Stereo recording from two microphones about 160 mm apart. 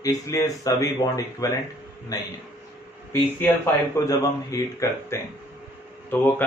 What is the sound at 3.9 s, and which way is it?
Speech, 20° left (ahead or behind).